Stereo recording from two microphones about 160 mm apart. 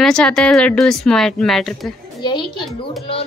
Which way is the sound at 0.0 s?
5° left (ahead or behind).